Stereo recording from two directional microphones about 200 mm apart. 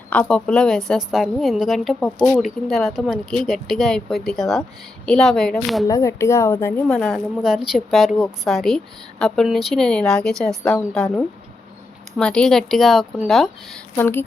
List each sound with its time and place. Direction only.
0.1 s a woman's voice: 5° left (ahead or behind)
5.9 s a woman's voice: 15° left (ahead or behind)